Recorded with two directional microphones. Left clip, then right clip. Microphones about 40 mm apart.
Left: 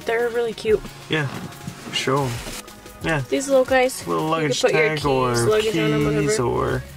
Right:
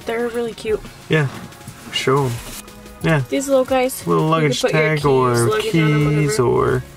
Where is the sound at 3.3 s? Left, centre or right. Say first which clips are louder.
Left 1 dB; left.